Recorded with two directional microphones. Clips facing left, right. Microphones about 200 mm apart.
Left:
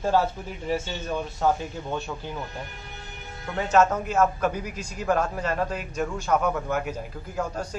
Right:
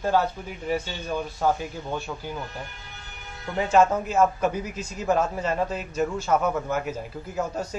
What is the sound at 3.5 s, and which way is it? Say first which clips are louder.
A man's voice: right 1 dB; 10° right (ahead or behind).